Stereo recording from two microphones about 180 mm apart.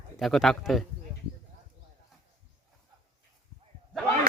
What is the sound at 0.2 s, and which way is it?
Speech, centre (ahead or behind).